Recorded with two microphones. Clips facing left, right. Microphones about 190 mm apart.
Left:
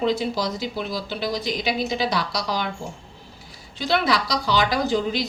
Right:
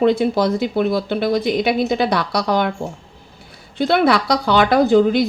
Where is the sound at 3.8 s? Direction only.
60° right (ahead or behind).